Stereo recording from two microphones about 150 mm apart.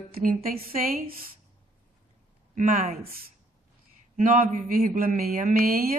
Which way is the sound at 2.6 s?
60° right (ahead or behind).